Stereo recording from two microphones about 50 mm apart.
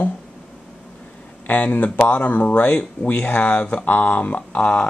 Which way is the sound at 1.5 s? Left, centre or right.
Left.